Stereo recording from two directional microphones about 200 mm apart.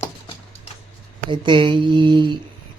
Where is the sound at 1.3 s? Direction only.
25° right (ahead or behind).